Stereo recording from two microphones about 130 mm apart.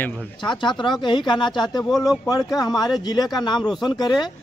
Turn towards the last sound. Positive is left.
turn(degrees=35)  # may be behind; listen again after turning